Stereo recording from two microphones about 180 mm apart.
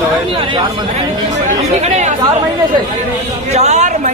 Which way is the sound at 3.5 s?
40° right (ahead or behind).